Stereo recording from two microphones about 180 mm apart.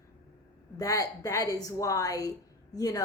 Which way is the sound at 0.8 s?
20° left (ahead or behind).